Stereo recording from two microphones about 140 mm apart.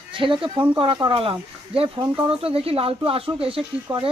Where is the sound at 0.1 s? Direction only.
40° right (ahead or behind).